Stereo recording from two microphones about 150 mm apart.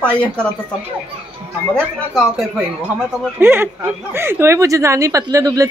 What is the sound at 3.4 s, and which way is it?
Speech, 15° right (ahead or behind).